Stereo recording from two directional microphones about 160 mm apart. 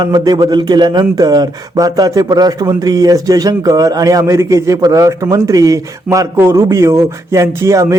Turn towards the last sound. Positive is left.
turn(degrees=-20)  # may be behind; listen again after turning